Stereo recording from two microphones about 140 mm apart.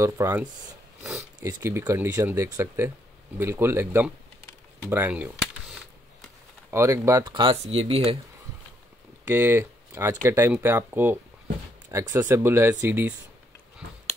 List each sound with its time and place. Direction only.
0.0 s speech: 20° right (ahead or behind)
1.4 s speech: 20° right (ahead or behind)
4.8 s a sound: 15° right (ahead or behind)
6.7 s speech: 20° right (ahead or behind)
7.2 s speech: 35° right (ahead or behind)
7.6 s speech: 45° right (ahead or behind)
9.2 s speech: 15° right (ahead or behind)